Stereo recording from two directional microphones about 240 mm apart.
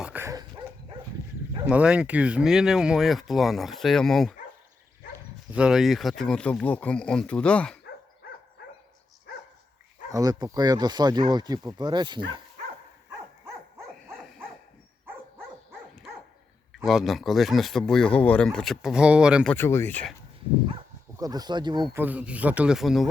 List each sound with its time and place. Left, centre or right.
0.0 s dog: centre
1.6 s speech: centre
5.5 s speech: centre
10.1 s speech: centre
14.1 s dog: centre
16.7 s speech: centre
19.5 s speech: centre
21.2 s speech: centre